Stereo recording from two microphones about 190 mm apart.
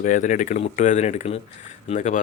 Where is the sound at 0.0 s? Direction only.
40° left (ahead or behind).